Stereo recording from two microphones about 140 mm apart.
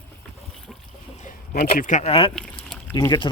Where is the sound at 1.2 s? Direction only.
55° left (ahead or behind).